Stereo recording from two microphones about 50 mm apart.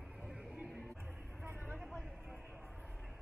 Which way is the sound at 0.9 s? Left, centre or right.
Right.